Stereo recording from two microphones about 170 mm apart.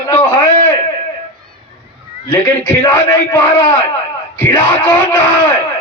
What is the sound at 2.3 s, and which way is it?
A man's voice, 10° left (ahead or behind).